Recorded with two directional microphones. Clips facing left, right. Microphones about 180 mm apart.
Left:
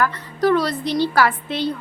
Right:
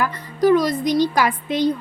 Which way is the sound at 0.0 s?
15° right (ahead or behind).